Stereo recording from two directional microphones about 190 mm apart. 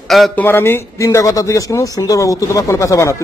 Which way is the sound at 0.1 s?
Centre (ahead or behind).